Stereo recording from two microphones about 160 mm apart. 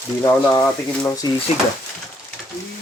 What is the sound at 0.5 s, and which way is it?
Speech, 20° left (ahead or behind).